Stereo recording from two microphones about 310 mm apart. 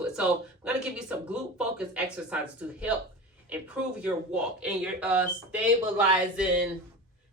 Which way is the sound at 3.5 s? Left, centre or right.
Centre.